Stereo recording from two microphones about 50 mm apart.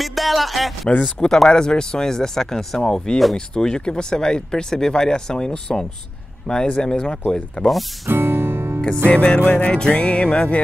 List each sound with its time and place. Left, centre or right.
0.0 s speech: centre
1.2 s speech: centre
3.3 s speech: centre
8.1 s music: right
8.8 s music: left